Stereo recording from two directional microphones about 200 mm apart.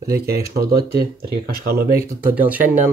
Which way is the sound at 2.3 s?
10° right (ahead or behind).